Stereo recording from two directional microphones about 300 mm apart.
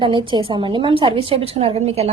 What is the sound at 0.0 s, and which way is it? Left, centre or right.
A woman's voice, centre.